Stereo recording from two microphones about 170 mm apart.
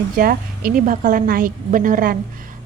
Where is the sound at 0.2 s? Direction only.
55° right (ahead or behind).